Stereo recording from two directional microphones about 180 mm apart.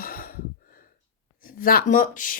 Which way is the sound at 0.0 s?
55° left (ahead or behind).